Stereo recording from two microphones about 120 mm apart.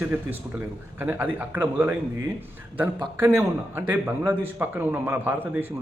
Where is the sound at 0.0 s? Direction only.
15° right (ahead or behind).